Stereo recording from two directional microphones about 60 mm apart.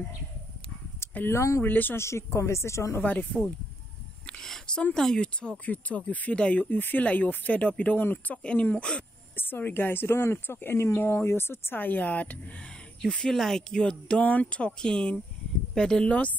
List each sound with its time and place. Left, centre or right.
1.3 s speech: left
1.6 s speech: left
2.0 s a woman's voice: left
3.0 s speech: left
4.3 s a sound: centre
4.9 s speech: centre
8.0 s speech: left
8.4 s speech: centre
9.4 s speech: left
13.0 s speech: centre